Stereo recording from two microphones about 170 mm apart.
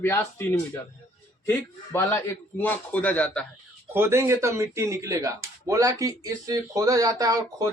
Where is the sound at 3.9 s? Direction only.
15° right (ahead or behind).